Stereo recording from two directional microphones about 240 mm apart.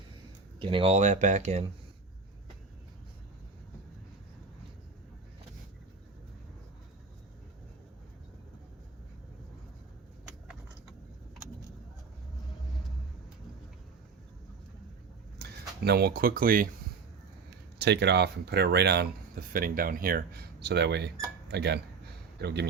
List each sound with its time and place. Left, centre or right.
0.6 s speech: right
15.4 s speech: right
17.7 s speech: right